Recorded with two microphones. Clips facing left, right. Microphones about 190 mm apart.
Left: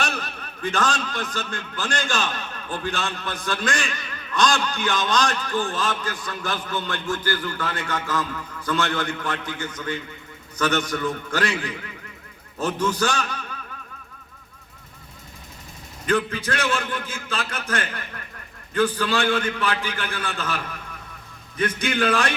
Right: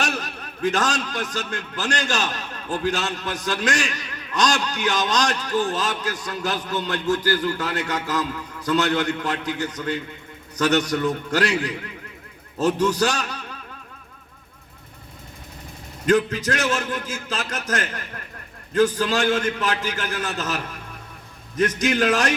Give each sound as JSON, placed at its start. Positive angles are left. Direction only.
{"t": 0.0, "sound": "a man's voice", "side_deg": -40}
{"t": 16.0, "sound": "a man's voice", "side_deg": -40}